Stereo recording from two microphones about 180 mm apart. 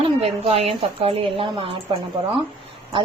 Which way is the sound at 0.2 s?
35° right (ahead or behind).